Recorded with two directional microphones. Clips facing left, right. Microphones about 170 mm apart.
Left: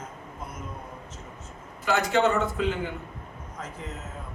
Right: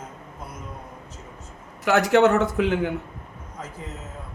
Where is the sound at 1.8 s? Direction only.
75° right (ahead or behind).